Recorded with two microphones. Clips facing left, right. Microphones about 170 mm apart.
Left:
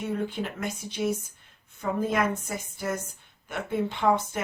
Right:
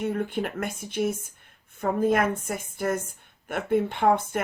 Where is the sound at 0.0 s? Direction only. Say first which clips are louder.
Right 3 dB; 50° right (ahead or behind).